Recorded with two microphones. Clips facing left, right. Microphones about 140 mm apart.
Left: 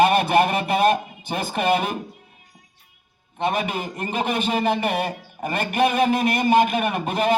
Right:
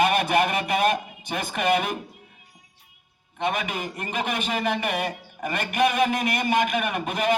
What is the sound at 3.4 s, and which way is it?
A man's voice, 30° left (ahead or behind).